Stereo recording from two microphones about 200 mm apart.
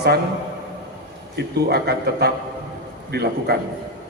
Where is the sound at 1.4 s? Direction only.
55° right (ahead or behind).